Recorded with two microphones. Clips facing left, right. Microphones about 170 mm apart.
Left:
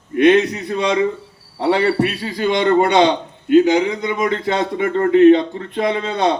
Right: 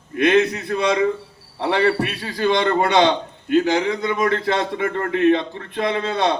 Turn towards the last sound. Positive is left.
turn(degrees=20)  # may be behind; listen again after turning